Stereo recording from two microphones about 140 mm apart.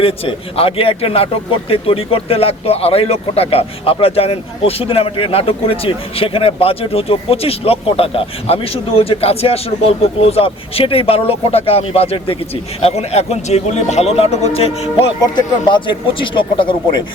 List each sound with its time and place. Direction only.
0.0 s speech: 40° left (ahead or behind)
15.2 s speech: 35° left (ahead or behind)